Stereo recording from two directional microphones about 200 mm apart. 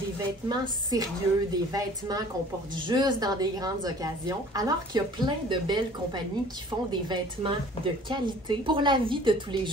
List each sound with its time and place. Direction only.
0.5 s a woman's voice: 20° right (ahead or behind)